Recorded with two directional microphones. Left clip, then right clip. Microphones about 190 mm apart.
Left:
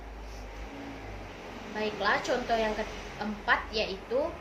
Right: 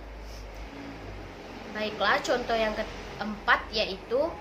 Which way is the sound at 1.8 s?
20° right (ahead or behind).